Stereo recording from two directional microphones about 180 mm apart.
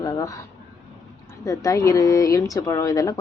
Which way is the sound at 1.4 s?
20° left (ahead or behind).